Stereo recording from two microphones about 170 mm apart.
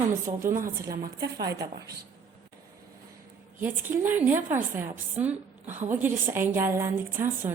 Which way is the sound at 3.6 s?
10° right (ahead or behind).